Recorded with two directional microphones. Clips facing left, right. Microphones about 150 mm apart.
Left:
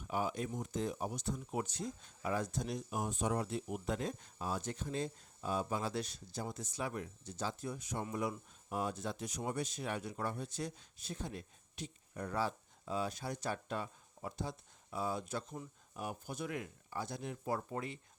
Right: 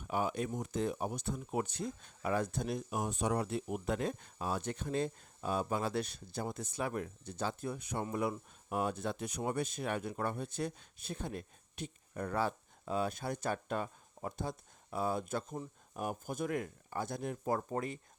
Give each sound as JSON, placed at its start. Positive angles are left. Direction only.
{"t": 0.1, "sound": "speech", "side_deg": -65}